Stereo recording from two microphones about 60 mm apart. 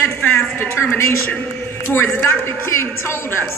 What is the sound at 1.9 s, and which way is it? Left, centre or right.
Speech, left.